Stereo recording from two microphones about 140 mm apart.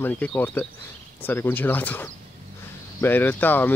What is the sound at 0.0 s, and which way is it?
Speech, 10° left (ahead or behind).